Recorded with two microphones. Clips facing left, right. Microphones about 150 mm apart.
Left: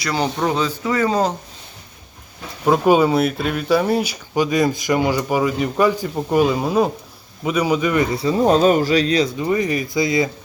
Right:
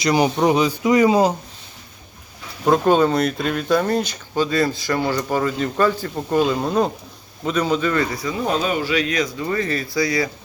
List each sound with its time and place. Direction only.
0.0 s speech: 15° right (ahead or behind)
2.6 s speech: 5° left (ahead or behind)
8.1 s speech: 30° left (ahead or behind)
9.4 s speech: 15° left (ahead or behind)